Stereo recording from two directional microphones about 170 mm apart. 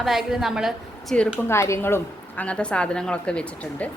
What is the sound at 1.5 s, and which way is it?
A woman's voice, 15° left (ahead or behind).